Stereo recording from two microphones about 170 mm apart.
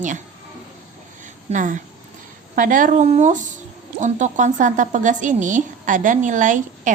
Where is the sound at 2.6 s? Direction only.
50° right (ahead or behind).